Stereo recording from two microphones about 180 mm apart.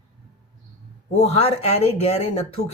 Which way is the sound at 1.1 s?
35° left (ahead or behind).